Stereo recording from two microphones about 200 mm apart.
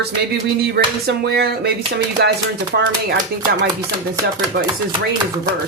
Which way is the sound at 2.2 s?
60° right (ahead or behind).